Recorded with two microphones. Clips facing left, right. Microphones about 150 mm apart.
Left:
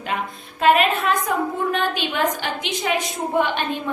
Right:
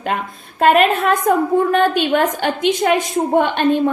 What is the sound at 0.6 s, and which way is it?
A woman's voice, 45° right (ahead or behind).